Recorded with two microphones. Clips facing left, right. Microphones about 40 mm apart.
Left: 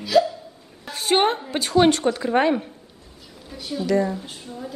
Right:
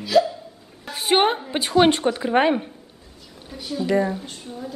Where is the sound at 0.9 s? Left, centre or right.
Centre.